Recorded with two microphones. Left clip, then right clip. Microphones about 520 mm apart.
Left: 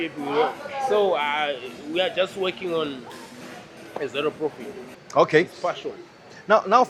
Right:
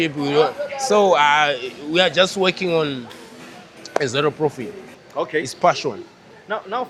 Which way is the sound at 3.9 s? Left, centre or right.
Right.